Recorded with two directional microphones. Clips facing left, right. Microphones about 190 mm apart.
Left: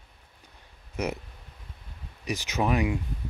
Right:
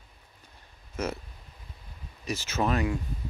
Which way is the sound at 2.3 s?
15° left (ahead or behind).